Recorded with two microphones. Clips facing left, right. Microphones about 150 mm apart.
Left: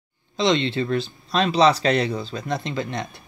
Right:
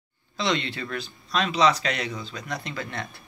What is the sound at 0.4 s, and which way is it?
Speech, 25° left (ahead or behind).